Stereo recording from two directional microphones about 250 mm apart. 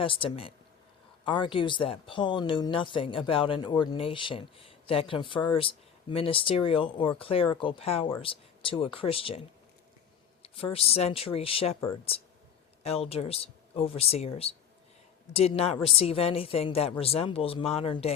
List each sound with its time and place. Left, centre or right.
0.0 s speech: left
10.4 s speech: left